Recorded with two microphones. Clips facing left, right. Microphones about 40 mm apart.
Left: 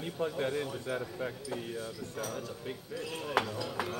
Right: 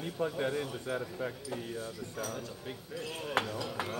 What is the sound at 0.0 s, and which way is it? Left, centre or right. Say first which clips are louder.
Speech: even; centre.